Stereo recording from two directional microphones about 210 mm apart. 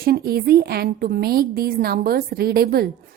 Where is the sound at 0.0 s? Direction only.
45° right (ahead or behind).